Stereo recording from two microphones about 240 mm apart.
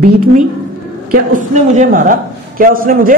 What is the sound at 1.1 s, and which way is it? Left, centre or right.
A woman's voice, right.